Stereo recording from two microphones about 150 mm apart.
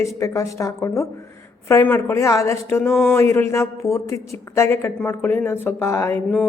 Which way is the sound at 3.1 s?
15° left (ahead or behind).